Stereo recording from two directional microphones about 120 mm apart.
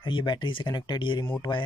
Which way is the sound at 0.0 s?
40° left (ahead or behind).